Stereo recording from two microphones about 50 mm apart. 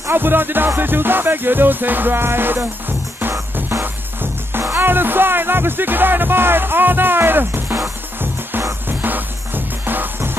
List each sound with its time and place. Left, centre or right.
0.1 s music: right
3.8 s speech: right
8.8 s music: right